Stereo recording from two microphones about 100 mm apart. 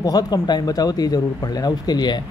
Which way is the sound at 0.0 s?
40° left (ahead or behind).